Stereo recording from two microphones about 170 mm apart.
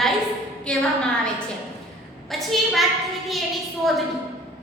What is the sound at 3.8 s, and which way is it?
Speech, centre (ahead or behind).